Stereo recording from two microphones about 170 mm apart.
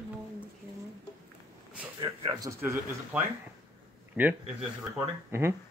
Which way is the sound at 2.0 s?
25° right (ahead or behind).